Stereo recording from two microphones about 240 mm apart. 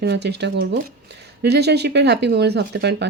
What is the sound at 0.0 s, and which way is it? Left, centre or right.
Speech, right.